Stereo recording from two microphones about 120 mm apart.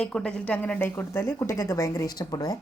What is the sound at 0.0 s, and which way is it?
A woman's voice, 5° left (ahead or behind).